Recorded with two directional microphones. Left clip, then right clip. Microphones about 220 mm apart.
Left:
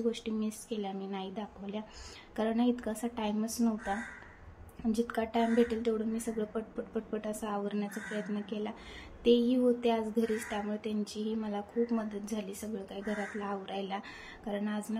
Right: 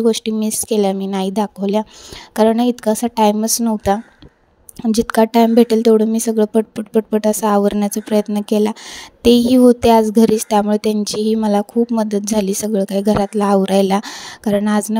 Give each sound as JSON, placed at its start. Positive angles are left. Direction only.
{"t": 0.0, "sound": "speech", "side_deg": -50}